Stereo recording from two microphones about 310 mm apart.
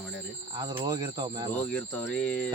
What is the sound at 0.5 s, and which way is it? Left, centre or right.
Speech, centre.